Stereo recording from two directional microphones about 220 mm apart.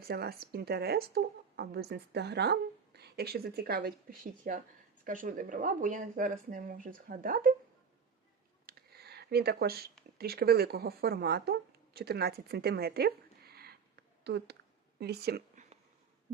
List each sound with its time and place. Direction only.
0.0 s a woman's voice: 45° right (ahead or behind)
8.6 s a sound: 45° right (ahead or behind)
10.2 s a woman's voice: 45° right (ahead or behind)